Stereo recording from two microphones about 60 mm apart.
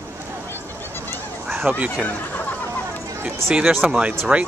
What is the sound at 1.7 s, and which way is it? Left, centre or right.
Speech, right.